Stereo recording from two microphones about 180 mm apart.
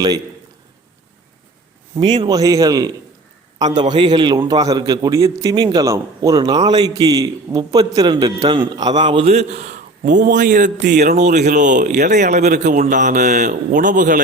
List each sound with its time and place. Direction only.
2.0 s a man's voice: 25° right (ahead or behind); by 14.2 s 45° right (ahead or behind)